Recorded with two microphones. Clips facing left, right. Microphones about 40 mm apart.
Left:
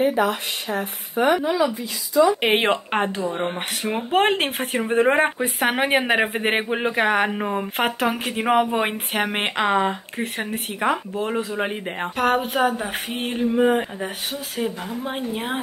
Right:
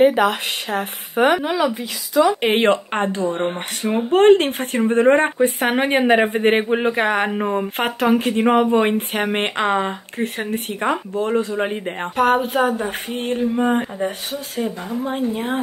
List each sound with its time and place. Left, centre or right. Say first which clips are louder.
0.0 s speech: right 5 dB; right
2.6 s speech: right 3 dB; centre
3.9 s speech: right 7 dB; centre
13.7 s speech: right 1 dB; centre
15.0 s speech: right 5 dB; left